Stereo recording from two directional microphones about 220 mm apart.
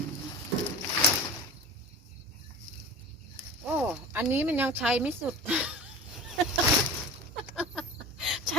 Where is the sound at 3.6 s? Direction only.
5° right (ahead or behind).